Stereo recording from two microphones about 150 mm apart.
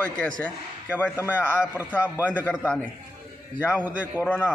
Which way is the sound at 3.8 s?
10° right (ahead or behind).